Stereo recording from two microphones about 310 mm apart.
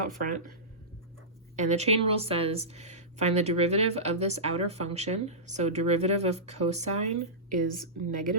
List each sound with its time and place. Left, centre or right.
1.5 s speech: right